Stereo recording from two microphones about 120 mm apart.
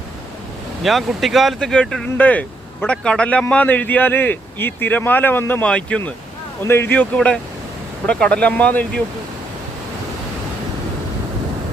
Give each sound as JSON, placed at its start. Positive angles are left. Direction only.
{"t": 0.8, "sound": "speech", "side_deg": 0}